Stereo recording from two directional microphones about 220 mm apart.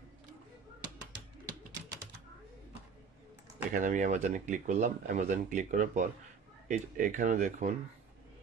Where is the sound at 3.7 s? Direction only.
35° right (ahead or behind).